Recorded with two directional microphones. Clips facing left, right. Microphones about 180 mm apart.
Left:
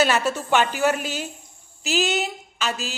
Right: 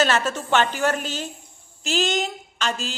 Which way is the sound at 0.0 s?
10° left (ahead or behind).